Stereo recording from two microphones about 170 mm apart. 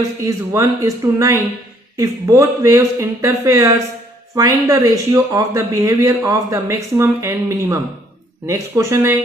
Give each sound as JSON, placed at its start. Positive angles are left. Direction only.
{"t": 0.2, "sound": "speech", "side_deg": -15}